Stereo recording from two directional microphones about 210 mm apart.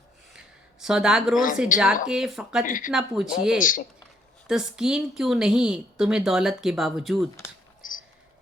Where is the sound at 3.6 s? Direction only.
40° left (ahead or behind).